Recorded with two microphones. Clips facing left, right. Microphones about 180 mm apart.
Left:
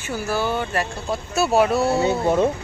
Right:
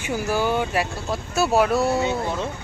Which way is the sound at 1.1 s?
Centre (ahead or behind).